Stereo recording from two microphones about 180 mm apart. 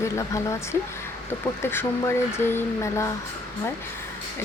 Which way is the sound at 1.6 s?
15° left (ahead or behind).